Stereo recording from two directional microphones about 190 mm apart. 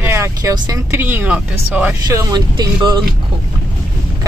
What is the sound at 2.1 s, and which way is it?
Speech, 20° right (ahead or behind).